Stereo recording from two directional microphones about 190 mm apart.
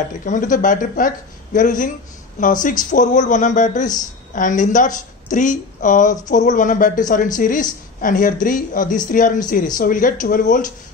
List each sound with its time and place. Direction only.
0.2 s a man's voice: 45° left (ahead or behind)